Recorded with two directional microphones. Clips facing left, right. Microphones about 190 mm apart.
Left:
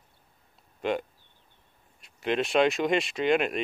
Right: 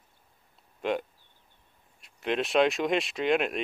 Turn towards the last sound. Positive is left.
turn(degrees=0)  # may be behind; listen again after turning